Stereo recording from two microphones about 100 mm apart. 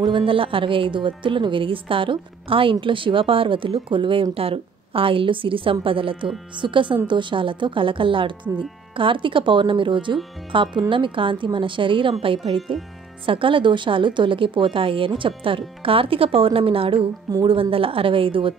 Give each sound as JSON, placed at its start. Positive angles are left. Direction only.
{"t": 0.0, "sound": "a woman's voice", "side_deg": -60}